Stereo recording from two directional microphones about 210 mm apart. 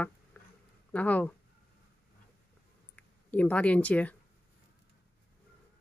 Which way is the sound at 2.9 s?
5° left (ahead or behind).